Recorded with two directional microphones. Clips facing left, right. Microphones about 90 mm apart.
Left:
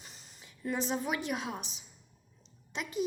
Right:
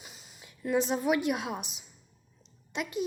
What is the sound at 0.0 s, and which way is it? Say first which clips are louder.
A woman's voice: right 2 dB; 5° right (ahead or behind).